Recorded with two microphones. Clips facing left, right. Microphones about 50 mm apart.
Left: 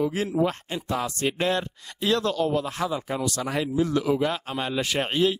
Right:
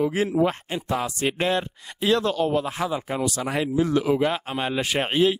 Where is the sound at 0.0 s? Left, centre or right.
Right.